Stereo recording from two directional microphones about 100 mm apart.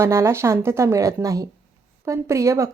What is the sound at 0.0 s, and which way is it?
Speech, 25° right (ahead or behind).